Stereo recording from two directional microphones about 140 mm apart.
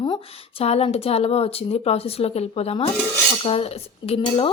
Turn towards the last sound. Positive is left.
turn(degrees=45)  # may be behind; listen again after turning